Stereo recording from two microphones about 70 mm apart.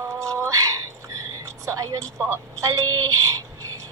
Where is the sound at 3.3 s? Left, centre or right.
Right.